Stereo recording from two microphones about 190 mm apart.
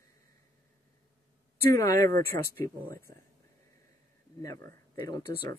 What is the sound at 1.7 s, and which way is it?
Speech, 15° left (ahead or behind).